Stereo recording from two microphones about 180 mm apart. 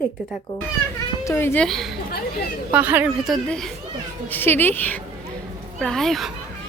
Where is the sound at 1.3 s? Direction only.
15° left (ahead or behind).